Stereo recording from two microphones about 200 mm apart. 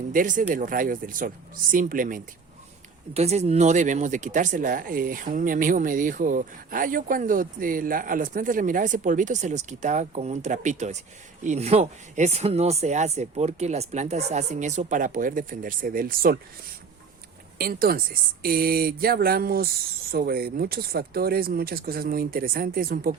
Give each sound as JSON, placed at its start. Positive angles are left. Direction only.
{"t": 0.1, "sound": "speech", "side_deg": -40}
{"t": 3.2, "sound": "speech", "side_deg": -30}
{"t": 17.6, "sound": "speech", "side_deg": -45}